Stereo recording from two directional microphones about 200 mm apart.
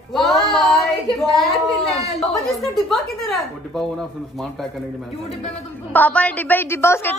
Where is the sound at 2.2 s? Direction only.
Centre (ahead or behind).